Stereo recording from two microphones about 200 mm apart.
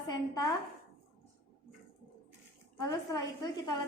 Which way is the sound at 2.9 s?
20° left (ahead or behind).